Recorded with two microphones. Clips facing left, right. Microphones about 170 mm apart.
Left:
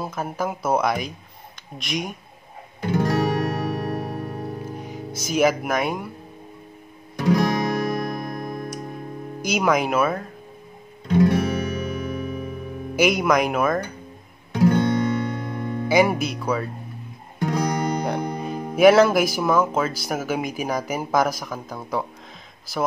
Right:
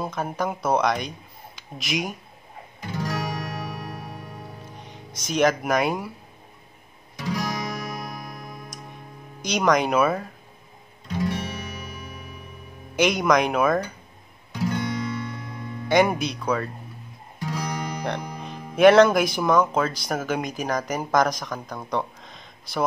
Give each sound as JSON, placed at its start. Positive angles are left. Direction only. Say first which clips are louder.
{"t": 0.0, "sound": "speech", "louder": "even", "side_deg": 5}
{"t": 2.8, "sound": "music", "louder": "left 8 dB", "side_deg": 55}
{"t": 4.7, "sound": "music", "louder": "left 9 dB", "side_deg": 5}
{"t": 5.2, "sound": "speech", "louder": "left 1 dB", "side_deg": 5}
{"t": 7.2, "sound": "guitar", "louder": "left 8 dB", "side_deg": 60}
{"t": 9.4, "sound": "speech", "louder": "even", "side_deg": 5}
{"t": 11.1, "sound": "music", "louder": "left 9 dB", "side_deg": 60}
{"t": 12.9, "sound": "speech", "louder": "left 1 dB", "side_deg": 5}
{"t": 14.5, "sound": "music", "louder": "left 8 dB", "side_deg": 55}
{"t": 15.9, "sound": "speech", "louder": "left 1 dB", "side_deg": 5}
{"t": 17.4, "sound": "guitar", "louder": "left 7 dB", "side_deg": 55}
{"t": 18.5, "sound": "music", "louder": "left 8 dB", "side_deg": 50}
{"t": 18.8, "sound": "speech", "louder": "even", "side_deg": 5}